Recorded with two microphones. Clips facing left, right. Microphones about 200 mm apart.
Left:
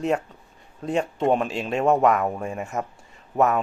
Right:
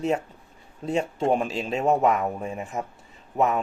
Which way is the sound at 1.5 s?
Centre (ahead or behind).